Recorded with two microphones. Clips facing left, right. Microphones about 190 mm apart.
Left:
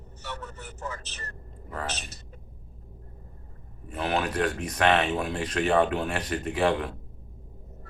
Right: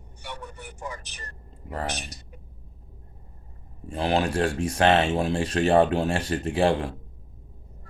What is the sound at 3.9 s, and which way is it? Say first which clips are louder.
Speech: right 4 dB; 30° right (ahead or behind).